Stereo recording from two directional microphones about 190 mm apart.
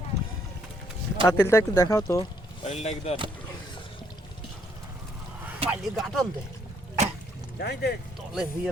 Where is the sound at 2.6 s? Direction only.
35° left (ahead or behind).